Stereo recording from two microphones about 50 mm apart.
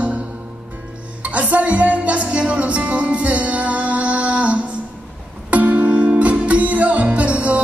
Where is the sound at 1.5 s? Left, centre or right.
Right.